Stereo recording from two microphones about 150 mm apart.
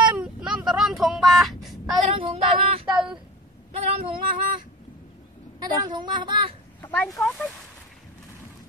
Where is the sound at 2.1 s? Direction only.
40° right (ahead or behind).